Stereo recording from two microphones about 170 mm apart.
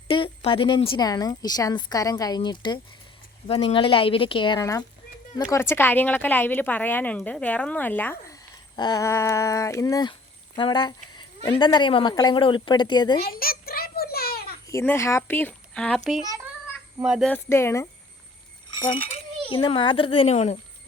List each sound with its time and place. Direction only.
0.1 s a woman's voice: 30° left (ahead or behind)
13.2 s a sound: 60° left (ahead or behind)
14.7 s speech: 15° left (ahead or behind)
16.2 s a child's voice: 20° right (ahead or behind)
17.0 s speech: centre (ahead or behind)
17.3 s speech: 15° left (ahead or behind)
18.7 s speech: 30° left (ahead or behind)